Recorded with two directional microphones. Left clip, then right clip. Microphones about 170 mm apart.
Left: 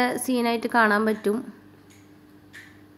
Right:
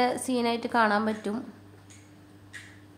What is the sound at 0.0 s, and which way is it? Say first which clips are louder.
A woman's voice: left 2 dB; 15° left (ahead or behind).